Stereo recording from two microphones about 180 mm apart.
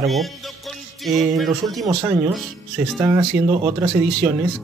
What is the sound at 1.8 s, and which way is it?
Speech, 20° right (ahead or behind).